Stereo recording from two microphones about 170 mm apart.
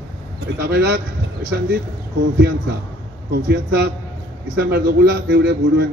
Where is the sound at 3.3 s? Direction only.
70° right (ahead or behind).